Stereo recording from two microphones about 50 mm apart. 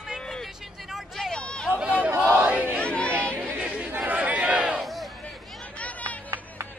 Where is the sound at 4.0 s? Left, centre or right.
Right.